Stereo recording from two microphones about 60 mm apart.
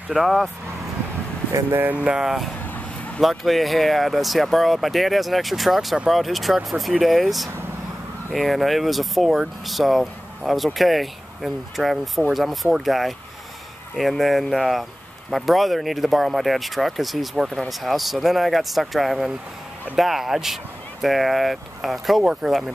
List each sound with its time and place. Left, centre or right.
0.1 s speech: centre
1.5 s speech: right
2.0 s speech: centre
22.2 s speech: centre